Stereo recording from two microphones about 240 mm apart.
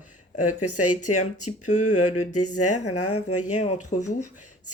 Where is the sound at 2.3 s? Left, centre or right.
Left.